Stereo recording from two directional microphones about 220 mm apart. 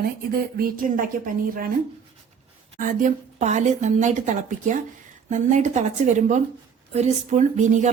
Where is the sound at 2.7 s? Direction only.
35° right (ahead or behind).